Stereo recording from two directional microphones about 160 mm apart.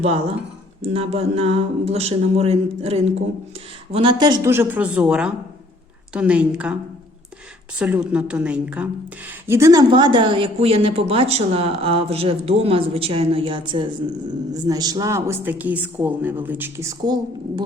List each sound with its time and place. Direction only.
0.8 s speech: 40° right (ahead or behind)
3.9 s speech: 30° right (ahead or behind)
4.5 s a woman's voice: 10° right (ahead or behind)
7.8 s a woman's voice: 5° right (ahead or behind)
9.9 s a woman's voice: 30° right (ahead or behind)